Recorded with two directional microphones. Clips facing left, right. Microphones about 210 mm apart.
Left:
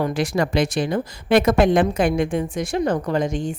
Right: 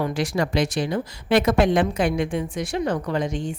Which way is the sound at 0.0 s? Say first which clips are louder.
Left 2 dB; 55° left (ahead or behind).